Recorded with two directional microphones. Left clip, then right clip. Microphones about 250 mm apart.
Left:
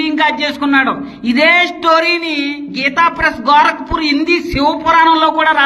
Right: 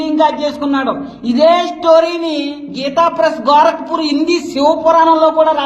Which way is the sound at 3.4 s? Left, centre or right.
Left.